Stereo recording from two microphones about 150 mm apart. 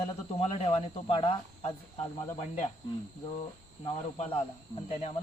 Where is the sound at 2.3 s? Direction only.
50° left (ahead or behind).